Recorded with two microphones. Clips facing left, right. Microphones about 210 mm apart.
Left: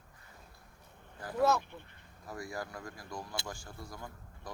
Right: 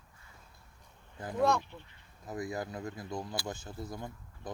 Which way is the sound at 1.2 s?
20° right (ahead or behind).